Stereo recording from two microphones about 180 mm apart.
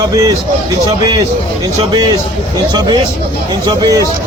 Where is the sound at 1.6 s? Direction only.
20° right (ahead or behind).